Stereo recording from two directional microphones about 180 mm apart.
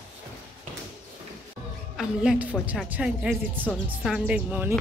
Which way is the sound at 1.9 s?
5° right (ahead or behind).